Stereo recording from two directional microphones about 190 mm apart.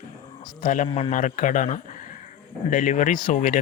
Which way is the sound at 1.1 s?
45° left (ahead or behind).